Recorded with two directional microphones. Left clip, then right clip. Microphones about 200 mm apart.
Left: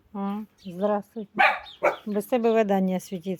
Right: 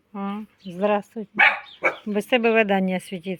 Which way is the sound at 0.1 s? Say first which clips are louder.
Right 1 dB; centre (ahead or behind).